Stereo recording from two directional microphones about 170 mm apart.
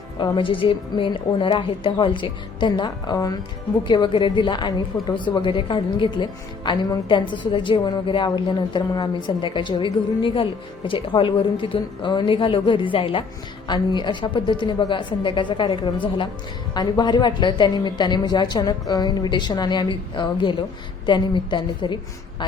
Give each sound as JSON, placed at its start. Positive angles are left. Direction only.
{"t": 0.2, "sound": "a woman's voice", "side_deg": 30}